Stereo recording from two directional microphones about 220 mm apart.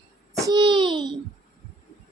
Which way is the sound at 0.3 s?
15° right (ahead or behind).